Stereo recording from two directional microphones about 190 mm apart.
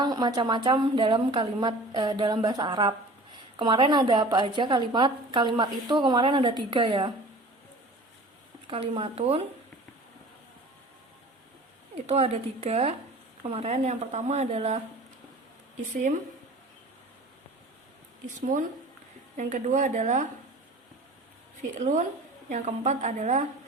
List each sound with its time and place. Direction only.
0.0 s a woman's voice: 20° right (ahead or behind)
8.6 s speech: 30° right (ahead or behind)
11.9 s speech: 35° right (ahead or behind)
18.3 s speech: 45° right (ahead or behind)
21.6 s speech: 40° right (ahead or behind)